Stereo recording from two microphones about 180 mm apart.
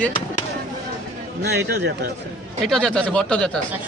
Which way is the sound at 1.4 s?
65° right (ahead or behind).